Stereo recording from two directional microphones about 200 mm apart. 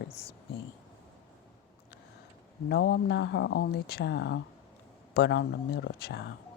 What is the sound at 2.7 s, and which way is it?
Speech, 55° left (ahead or behind).